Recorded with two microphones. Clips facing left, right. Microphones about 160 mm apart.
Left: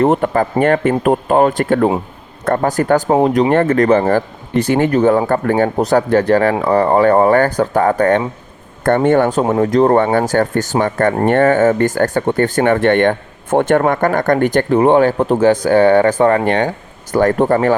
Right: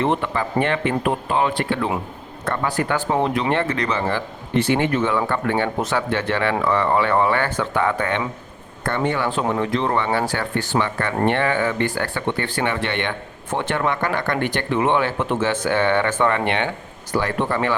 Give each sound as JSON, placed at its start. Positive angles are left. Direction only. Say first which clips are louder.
{"t": 0.0, "sound": "speech", "louder": "left 8 dB", "side_deg": 45}